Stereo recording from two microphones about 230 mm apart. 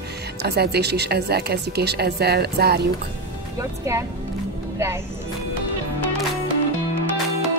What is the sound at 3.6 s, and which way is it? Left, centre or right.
Speech, centre.